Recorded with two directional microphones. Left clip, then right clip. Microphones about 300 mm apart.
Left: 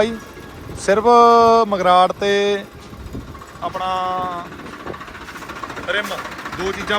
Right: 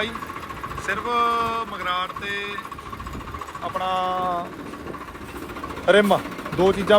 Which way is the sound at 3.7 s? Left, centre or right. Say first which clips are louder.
Left 2 dB; centre.